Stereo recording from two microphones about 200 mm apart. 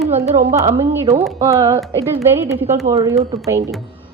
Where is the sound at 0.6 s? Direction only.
35° right (ahead or behind).